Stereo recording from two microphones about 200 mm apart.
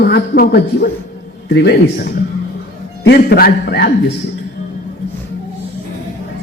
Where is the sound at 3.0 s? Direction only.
55° left (ahead or behind).